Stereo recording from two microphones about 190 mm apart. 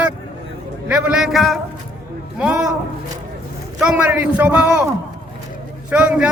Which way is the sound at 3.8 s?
5° right (ahead or behind).